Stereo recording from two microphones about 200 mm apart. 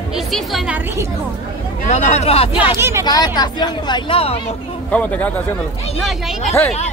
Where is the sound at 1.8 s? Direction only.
35° left (ahead or behind).